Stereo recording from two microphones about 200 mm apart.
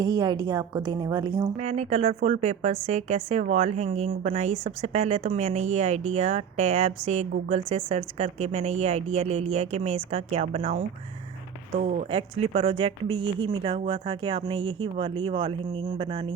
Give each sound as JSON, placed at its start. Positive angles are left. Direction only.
{"t": 0.0, "sound": "speech", "side_deg": -20}
{"t": 1.5, "sound": "speech", "side_deg": -35}
{"t": 11.8, "sound": "speech", "side_deg": -40}
{"t": 12.1, "sound": "speech", "side_deg": -25}